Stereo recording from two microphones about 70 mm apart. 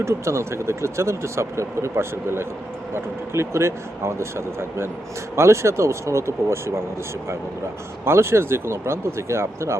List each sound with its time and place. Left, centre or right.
0.0 s speech: right
8.0 s speech: right